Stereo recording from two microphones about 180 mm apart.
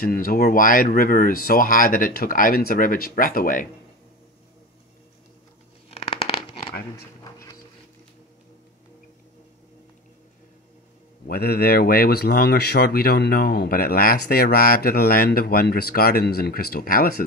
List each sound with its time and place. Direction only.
0.0 s speech: 55° left (ahead or behind)
5.9 s a sound: 35° left (ahead or behind)
11.2 s speech: 60° left (ahead or behind)